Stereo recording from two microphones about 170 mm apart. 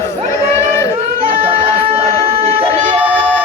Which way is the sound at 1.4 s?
35° right (ahead or behind).